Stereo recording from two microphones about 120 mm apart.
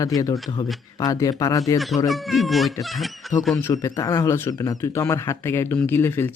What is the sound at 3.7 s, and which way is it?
Speech, 30° left (ahead or behind).